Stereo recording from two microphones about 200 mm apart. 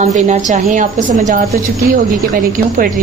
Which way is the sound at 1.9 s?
45° right (ahead or behind).